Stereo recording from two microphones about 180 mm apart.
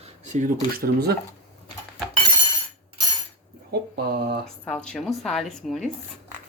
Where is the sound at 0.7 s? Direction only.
60° right (ahead or behind).